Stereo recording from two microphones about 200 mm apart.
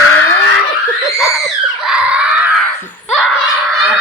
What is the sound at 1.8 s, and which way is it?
Screaming, 5° right (ahead or behind).